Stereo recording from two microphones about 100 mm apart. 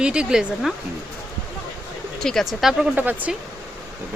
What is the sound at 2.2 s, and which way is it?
Speech, 5° left (ahead or behind).